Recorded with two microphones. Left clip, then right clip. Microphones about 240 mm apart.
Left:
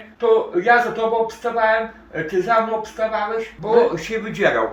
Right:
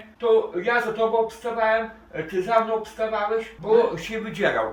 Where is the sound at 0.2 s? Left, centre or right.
Centre.